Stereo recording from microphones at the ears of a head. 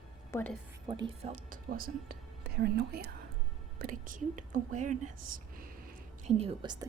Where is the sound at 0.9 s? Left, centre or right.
Right.